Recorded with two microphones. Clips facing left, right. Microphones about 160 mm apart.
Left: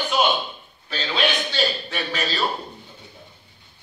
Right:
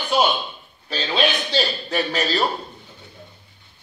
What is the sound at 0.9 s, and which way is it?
A man's voice, 35° right (ahead or behind).